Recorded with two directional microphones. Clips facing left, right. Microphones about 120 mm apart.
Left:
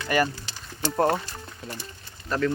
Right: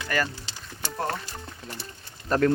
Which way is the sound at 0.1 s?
15° left (ahead or behind).